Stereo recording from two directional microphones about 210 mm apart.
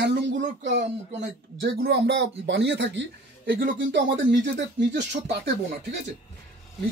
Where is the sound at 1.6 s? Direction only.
55° right (ahead or behind).